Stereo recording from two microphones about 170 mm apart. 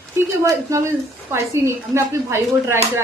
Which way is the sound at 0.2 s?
15° right (ahead or behind).